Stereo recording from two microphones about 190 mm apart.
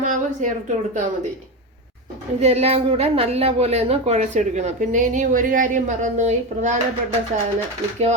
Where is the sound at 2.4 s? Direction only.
35° right (ahead or behind).